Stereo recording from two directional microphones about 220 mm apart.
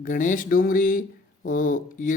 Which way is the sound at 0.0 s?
35° left (ahead or behind).